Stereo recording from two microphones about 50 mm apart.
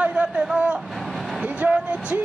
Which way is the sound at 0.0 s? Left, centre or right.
Right.